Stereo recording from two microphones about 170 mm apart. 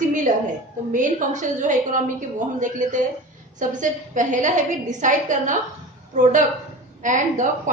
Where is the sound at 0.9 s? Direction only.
45° right (ahead or behind).